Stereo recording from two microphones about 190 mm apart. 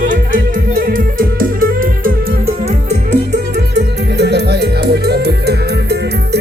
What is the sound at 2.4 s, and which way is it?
Music, 35° right (ahead or behind).